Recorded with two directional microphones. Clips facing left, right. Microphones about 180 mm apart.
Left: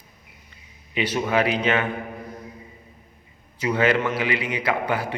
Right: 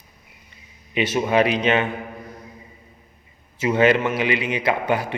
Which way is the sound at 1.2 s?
20° right (ahead or behind).